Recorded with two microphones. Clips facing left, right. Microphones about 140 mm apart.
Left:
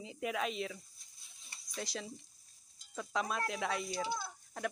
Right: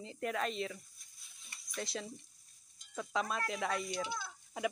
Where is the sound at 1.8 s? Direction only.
Centre (ahead or behind).